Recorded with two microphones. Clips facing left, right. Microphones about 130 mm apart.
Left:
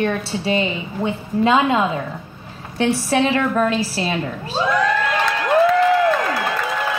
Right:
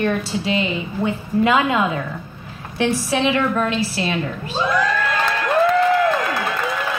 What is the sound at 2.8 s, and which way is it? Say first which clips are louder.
A woman's voice: left 2 dB; 40° left (ahead or behind).